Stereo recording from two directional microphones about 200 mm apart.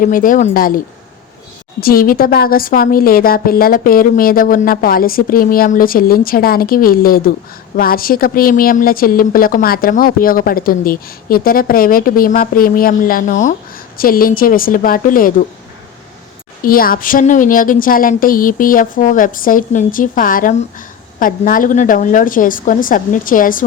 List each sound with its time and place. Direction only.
0.0 s a woman's voice: 45° left (ahead or behind)
1.8 s a woman's voice: 50° left (ahead or behind)
16.6 s a woman's voice: 45° left (ahead or behind)